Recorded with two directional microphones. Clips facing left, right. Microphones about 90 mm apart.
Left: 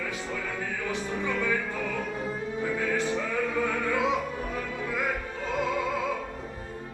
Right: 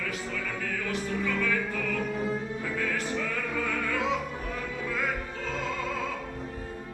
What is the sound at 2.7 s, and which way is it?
Music, 20° left (ahead or behind).